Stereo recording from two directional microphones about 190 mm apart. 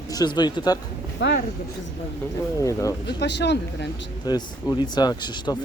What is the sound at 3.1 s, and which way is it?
Speech, 65° left (ahead or behind).